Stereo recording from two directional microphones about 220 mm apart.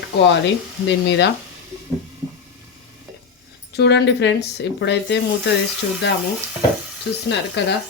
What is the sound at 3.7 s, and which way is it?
Speech, 50° left (ahead or behind).